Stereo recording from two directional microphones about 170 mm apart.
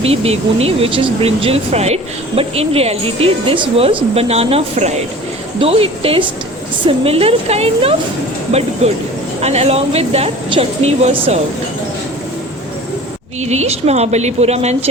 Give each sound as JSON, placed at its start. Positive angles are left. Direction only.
{"t": 0.0, "sound": "speech", "side_deg": -35}
{"t": 13.4, "sound": "speech", "side_deg": -40}